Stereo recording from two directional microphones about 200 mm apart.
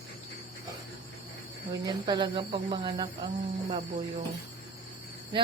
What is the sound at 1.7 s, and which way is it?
Speech, 20° right (ahead or behind).